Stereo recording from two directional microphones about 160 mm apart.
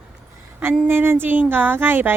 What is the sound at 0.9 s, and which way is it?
Speech, 15° right (ahead or behind).